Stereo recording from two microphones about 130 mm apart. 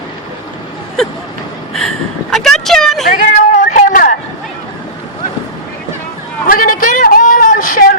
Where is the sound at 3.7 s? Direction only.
85° left.